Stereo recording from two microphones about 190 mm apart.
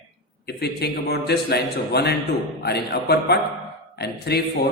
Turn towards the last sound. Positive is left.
turn(degrees=60)  # may be behind; listen again after turning